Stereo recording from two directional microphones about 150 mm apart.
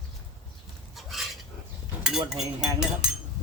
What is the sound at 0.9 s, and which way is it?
Stir, centre (ahead or behind).